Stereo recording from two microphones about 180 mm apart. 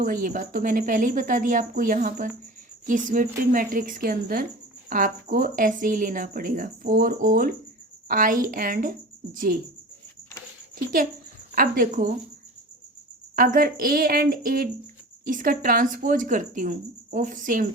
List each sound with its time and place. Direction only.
0.0 s speech: 50° right (ahead or behind)
11.5 s speech: 50° right (ahead or behind)
13.3 s speech: 50° right (ahead or behind)